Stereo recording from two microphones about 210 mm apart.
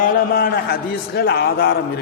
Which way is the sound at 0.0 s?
45° left (ahead or behind).